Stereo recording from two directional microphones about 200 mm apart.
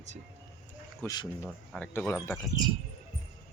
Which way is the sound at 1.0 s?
15° left (ahead or behind).